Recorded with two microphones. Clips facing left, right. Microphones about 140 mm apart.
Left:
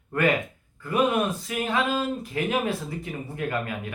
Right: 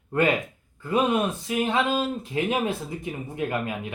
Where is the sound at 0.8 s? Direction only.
20° right (ahead or behind).